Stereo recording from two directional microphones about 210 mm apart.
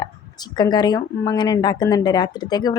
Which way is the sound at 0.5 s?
20° left (ahead or behind).